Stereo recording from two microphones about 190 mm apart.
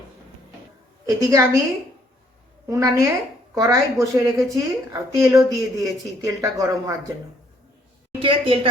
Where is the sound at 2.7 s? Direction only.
15° right (ahead or behind).